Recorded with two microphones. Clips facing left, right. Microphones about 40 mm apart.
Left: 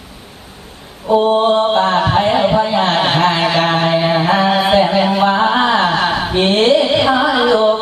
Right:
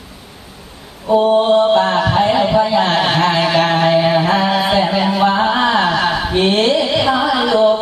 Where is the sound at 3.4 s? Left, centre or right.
Left.